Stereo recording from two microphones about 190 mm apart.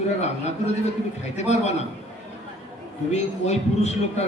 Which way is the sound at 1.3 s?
35° left (ahead or behind).